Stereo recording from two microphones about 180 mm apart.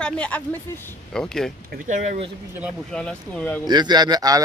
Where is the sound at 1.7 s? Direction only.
45° right (ahead or behind).